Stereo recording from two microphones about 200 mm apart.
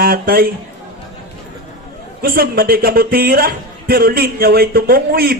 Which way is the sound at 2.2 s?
50° right (ahead or behind).